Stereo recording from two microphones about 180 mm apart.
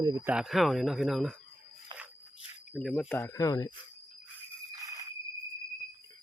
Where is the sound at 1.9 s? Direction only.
25° right (ahead or behind).